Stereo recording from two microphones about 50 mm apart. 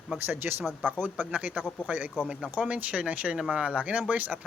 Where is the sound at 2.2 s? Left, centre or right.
Centre.